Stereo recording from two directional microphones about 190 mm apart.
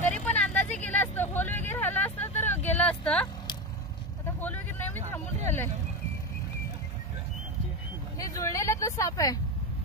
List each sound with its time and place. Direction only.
0.0 s vehicle: 5° left (ahead or behind)
4.4 s vehicle: 10° left (ahead or behind)
8.2 s vehicle: 15° left (ahead or behind)